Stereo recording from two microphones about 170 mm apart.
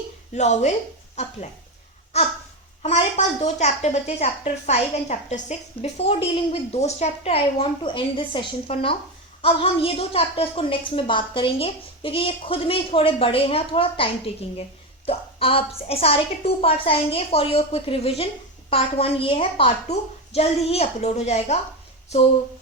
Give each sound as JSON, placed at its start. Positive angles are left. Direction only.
{"t": 0.3, "sound": "speech", "side_deg": 40}
{"t": 2.8, "sound": "a woman's voice", "side_deg": 45}